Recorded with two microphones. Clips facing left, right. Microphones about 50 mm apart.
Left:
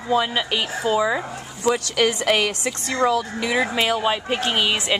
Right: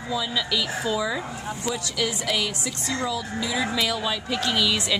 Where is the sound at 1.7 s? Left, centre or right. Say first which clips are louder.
Left 9 dB; left.